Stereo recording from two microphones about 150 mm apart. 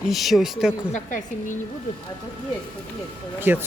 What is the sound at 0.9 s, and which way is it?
Speech, 60° left (ahead or behind).